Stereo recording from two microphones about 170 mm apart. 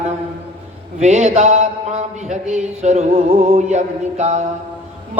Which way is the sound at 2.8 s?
40° right (ahead or behind).